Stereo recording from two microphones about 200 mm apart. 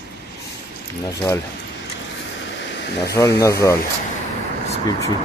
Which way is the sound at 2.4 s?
65° left (ahead or behind).